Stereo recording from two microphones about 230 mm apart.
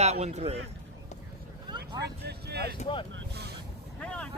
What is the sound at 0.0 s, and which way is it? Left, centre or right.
Speech, right.